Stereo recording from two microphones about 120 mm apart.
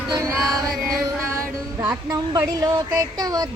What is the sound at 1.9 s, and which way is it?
Speech, 30° right (ahead or behind).